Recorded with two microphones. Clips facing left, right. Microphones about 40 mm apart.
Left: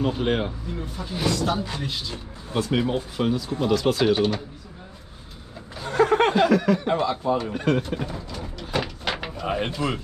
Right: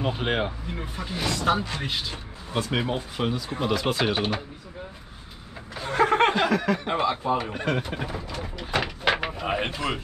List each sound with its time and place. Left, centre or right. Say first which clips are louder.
0.0 s speech: left 2 dB; centre
0.7 s speech: left 1 dB; right
2.5 s speech: left 3 dB; centre
5.8 s snicker: left 1 dB; centre
7.0 s speech: left 1 dB; right
7.5 s bird: left 4 dB; centre
9.5 s speech: left 2 dB; right